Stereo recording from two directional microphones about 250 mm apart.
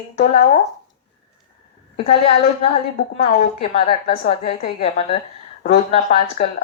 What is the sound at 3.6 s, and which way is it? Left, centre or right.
Speech, left.